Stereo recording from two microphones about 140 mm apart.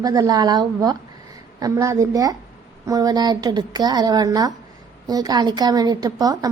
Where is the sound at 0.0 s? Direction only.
25° right (ahead or behind).